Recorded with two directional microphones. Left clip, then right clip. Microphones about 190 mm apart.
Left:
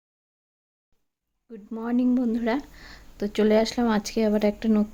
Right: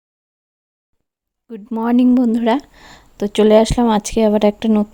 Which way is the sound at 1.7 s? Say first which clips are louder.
Right 10 dB; 50° right (ahead or behind).